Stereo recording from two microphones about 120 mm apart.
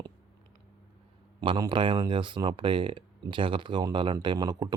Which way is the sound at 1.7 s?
40° right (ahead or behind).